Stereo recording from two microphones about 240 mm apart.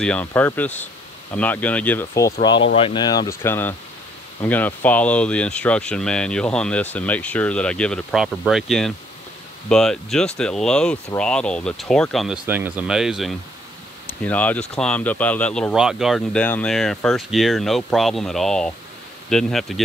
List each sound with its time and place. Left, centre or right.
0.0 s speech: centre
2.4 s speech: left; by 19.8 s centre